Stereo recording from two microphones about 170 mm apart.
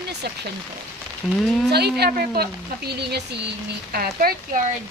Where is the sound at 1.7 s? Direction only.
70° right (ahead or behind).